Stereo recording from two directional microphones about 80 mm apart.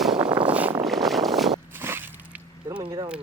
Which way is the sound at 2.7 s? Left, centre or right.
Right.